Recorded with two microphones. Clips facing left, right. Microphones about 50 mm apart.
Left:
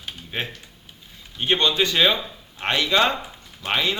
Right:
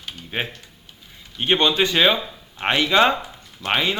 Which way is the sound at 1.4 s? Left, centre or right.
Right.